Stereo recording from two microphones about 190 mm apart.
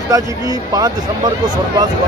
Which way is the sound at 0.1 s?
20° right (ahead or behind).